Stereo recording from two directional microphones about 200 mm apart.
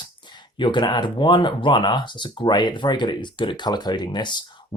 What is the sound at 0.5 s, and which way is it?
Speech, 25° left (ahead or behind).